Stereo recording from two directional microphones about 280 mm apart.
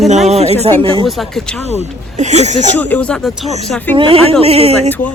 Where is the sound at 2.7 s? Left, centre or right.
Centre.